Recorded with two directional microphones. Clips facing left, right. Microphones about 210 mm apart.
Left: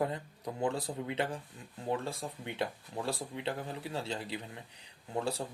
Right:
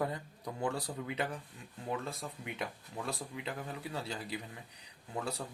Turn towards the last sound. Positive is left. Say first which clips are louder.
# left 4 dB
turn(degrees=30)  # may be behind; listen again after turning